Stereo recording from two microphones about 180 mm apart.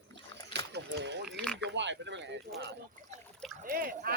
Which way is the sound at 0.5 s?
75° right (ahead or behind).